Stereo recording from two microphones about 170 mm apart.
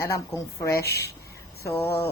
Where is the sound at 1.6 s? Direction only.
15° left (ahead or behind).